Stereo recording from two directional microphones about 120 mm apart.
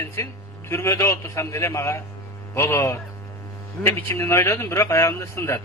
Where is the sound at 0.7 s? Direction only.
20° left (ahead or behind).